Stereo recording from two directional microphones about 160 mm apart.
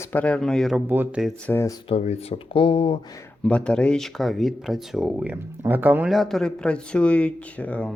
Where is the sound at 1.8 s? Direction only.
40° left (ahead or behind).